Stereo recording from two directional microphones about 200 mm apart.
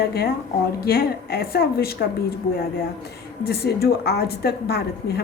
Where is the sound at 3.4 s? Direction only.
50° left (ahead or behind).